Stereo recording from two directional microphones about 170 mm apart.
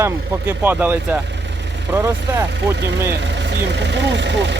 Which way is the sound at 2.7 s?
90° right.